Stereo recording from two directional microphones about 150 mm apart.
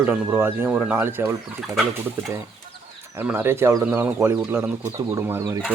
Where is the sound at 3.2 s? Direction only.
15° right (ahead or behind).